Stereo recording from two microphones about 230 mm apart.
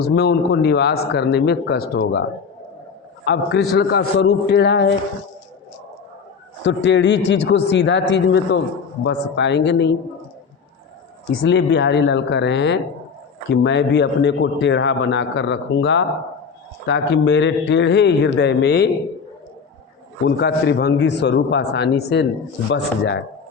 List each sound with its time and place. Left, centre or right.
0.0 s speech: left
3.2 s speech: left
6.6 s speech: left
11.3 s speech: left
20.2 s speech: left